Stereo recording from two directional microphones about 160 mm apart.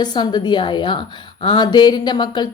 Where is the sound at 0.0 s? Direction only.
25° left (ahead or behind).